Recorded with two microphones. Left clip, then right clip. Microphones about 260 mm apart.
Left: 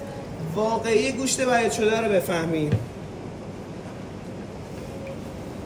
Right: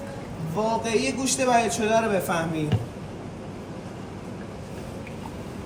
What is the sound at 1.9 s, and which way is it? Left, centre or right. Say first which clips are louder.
Speech: even; right.